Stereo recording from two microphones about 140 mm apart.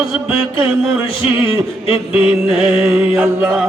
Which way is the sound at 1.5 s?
45° left (ahead or behind).